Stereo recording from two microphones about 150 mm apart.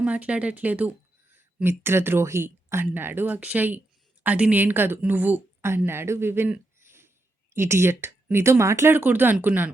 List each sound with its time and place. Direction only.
0.0 s a woman's voice: 10° right (ahead or behind)